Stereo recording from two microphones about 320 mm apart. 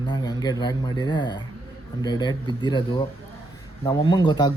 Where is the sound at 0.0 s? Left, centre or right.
Centre.